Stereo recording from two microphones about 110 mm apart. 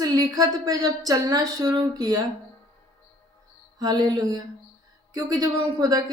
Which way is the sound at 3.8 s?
40° right (ahead or behind).